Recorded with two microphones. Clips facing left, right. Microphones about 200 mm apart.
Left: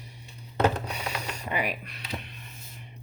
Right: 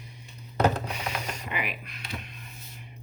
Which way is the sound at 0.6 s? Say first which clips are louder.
Even; 40° left (ahead or behind).